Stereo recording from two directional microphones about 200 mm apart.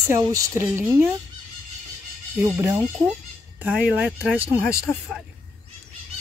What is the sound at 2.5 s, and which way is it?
Speech, 15° right (ahead or behind).